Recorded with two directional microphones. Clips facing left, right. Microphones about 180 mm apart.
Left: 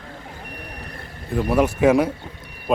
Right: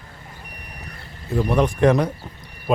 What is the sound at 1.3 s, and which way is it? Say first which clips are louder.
Speech: even; centre (ahead or behind).